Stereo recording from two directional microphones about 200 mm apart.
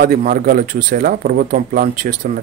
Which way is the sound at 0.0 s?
45° right (ahead or behind).